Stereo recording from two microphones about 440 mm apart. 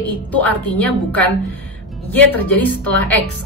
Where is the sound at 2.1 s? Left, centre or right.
Centre.